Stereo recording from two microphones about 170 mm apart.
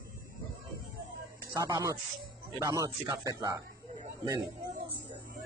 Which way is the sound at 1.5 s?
20° right (ahead or behind).